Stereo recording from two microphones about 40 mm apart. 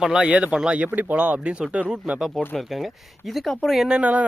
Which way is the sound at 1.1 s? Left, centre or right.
Right.